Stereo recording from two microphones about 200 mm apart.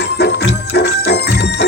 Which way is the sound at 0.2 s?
55° left (ahead or behind).